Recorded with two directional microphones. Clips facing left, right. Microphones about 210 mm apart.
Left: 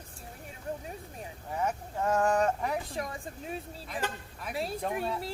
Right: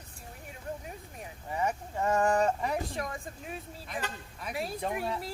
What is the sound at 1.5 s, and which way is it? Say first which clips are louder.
Speech: right 1 dB; centre (ahead or behind).